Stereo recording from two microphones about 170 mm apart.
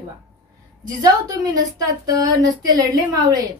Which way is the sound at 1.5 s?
20° right (ahead or behind).